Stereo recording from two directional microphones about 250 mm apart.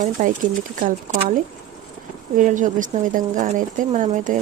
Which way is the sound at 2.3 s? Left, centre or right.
Right.